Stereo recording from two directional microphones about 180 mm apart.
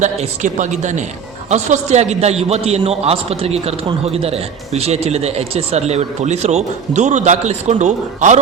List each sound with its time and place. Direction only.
0.0 s a man's voice: 40° right (ahead or behind)